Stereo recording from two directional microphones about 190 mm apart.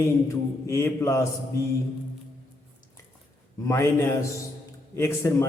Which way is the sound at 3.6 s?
15° left (ahead or behind).